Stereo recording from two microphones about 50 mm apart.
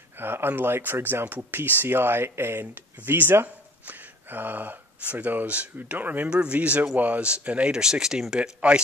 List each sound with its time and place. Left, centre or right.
0.2 s speech: right
0.9 s speech: right
1.2 s speech: right
6.2 s speech: right
8.5 s speech: right